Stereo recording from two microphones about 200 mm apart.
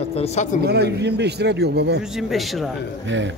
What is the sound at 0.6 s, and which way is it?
Speech, 55° right (ahead or behind).